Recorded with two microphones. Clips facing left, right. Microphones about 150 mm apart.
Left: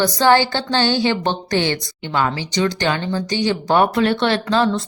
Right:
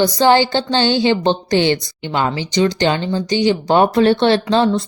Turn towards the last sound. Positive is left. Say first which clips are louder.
# right 3 dB
turn(degrees=-20)  # may be behind; listen again after turning